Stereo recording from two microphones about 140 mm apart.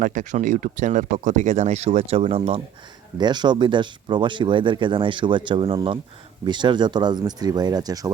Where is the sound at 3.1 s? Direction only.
30° right (ahead or behind).